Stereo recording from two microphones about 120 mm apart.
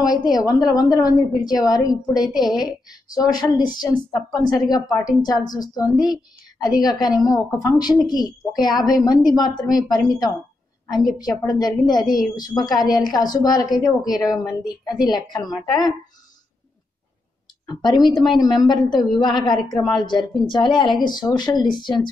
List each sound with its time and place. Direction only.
0.0 s a woman's voice: 30° left (ahead or behind)
17.6 s a woman's voice: 40° left (ahead or behind)